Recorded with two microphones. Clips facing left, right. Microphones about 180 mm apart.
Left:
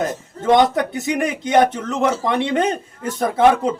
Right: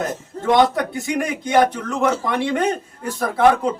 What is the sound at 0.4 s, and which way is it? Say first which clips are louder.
Speech: left 1 dB; 20° left (ahead or behind).